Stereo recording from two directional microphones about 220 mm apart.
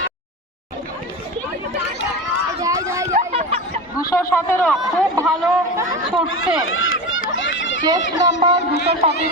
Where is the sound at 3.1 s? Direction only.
30° right (ahead or behind).